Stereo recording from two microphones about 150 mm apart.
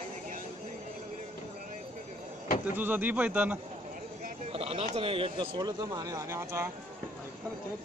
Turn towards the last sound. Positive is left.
turn(degrees=-15)  # may be behind; listen again after turning